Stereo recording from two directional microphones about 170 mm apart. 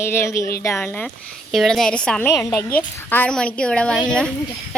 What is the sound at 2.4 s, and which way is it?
A woman's voice, 20° left (ahead or behind).